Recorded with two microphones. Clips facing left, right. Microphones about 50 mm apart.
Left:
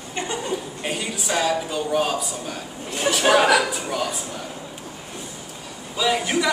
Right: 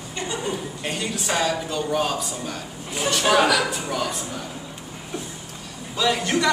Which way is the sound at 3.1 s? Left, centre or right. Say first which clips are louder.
Left 2 dB; left.